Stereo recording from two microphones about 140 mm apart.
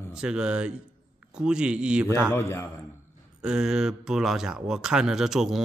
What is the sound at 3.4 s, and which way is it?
Speech, 5° right (ahead or behind).